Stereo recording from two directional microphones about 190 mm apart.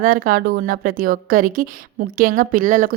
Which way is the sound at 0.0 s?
50° right (ahead or behind).